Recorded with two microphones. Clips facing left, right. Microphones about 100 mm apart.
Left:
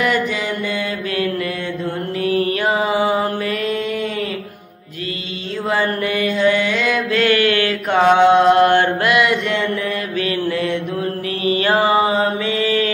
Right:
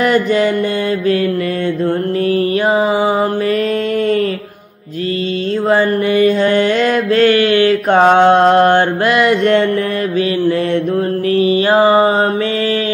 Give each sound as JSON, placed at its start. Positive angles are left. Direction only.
{"t": 0.0, "sound": "mantra", "side_deg": -40}
{"t": 5.7, "sound": "mantra", "side_deg": -30}
{"t": 6.4, "sound": "mantra", "side_deg": -45}
{"t": 7.9, "sound": "mantra", "side_deg": -45}
{"t": 9.4, "sound": "mantra", "side_deg": -50}
{"t": 10.7, "sound": "mantra", "side_deg": -35}